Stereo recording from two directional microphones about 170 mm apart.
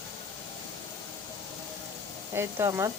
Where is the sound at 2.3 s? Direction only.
15° right (ahead or behind).